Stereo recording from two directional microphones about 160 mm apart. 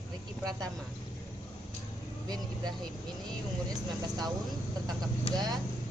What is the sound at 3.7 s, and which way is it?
Speech, 25° right (ahead or behind).